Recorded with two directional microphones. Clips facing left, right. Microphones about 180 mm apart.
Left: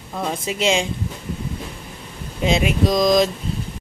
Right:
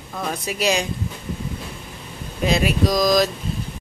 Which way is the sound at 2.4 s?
20° left (ahead or behind).